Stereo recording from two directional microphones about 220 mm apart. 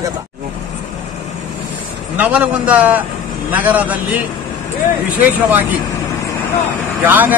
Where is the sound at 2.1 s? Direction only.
5° right (ahead or behind).